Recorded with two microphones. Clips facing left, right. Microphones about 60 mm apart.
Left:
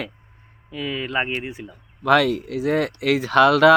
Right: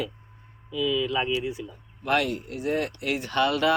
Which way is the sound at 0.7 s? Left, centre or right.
Left.